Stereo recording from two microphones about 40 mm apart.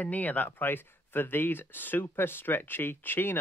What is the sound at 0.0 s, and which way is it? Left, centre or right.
Speech, left.